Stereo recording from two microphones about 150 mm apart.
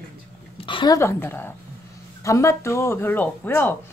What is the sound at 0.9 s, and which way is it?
Speech, 15° left (ahead or behind).